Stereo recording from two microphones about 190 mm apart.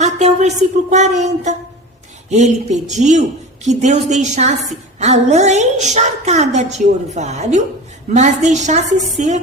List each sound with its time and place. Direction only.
0.0 s a woman's voice: 35° right (ahead or behind)